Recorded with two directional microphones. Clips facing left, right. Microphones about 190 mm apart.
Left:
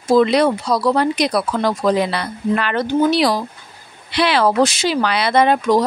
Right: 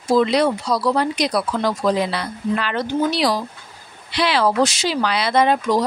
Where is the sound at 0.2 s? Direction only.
60° left (ahead or behind).